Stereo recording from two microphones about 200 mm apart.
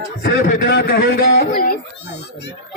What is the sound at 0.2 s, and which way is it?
A man's voice, 50° left (ahead or behind).